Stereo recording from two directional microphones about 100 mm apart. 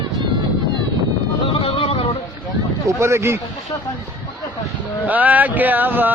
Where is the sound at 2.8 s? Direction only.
30° right (ahead or behind).